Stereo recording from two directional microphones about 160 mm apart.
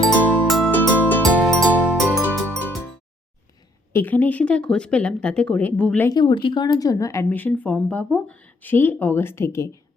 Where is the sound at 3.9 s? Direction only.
10° left (ahead or behind).